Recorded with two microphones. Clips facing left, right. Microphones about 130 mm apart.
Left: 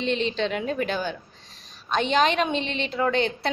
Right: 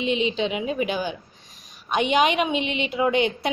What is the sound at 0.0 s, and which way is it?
A woman's voice, 10° right (ahead or behind).